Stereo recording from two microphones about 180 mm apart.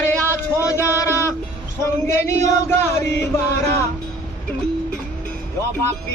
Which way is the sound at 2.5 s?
15° left (ahead or behind).